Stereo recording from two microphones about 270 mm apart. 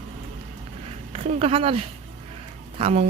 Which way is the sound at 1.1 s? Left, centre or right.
Right.